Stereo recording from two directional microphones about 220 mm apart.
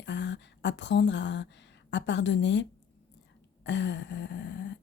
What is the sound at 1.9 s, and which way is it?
A woman's voice, 55° left (ahead or behind).